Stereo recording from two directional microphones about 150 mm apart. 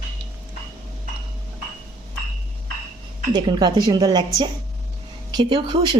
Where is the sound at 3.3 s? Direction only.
30° right (ahead or behind).